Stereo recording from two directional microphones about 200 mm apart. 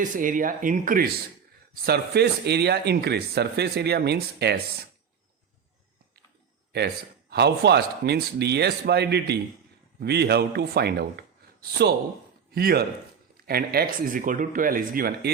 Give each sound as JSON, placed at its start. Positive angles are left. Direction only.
{"t": 0.0, "sound": "speech", "side_deg": -40}
{"t": 6.7, "sound": "speech", "side_deg": -55}
{"t": 12.5, "sound": "a man's voice", "side_deg": -50}